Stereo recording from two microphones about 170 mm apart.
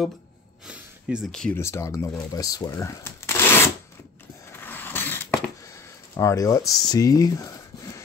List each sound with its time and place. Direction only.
0.7 s speech: 5° right (ahead or behind)
1.6 s speech: 15° left (ahead or behind)
4.5 s a sound: 10° left (ahead or behind)
6.1 s speech: 20° left (ahead or behind)